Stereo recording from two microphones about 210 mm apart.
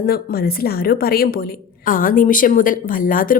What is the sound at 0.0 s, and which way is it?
A woman's voice, 45° left (ahead or behind).